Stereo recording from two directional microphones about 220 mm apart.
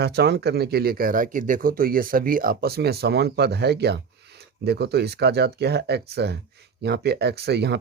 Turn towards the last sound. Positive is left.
turn(degrees=-50)  # may be behind; listen again after turning